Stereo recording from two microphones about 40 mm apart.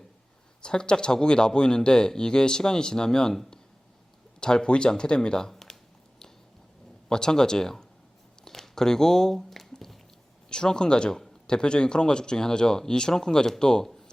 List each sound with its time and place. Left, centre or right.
0.6 s speech: left
7.1 s speech: centre
8.4 s a sound: centre
10.5 s speech: left